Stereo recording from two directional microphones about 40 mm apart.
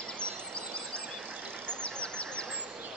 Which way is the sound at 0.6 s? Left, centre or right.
Left.